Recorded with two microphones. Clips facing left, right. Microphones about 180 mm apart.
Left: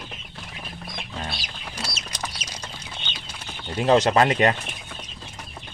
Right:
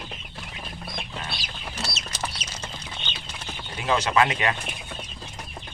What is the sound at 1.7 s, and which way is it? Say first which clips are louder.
Chicken: even; 10° left (ahead or behind).